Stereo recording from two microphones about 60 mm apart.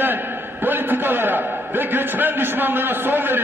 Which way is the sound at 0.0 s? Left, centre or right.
Right.